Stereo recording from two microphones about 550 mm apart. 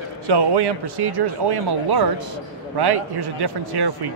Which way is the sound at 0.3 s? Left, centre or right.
Right.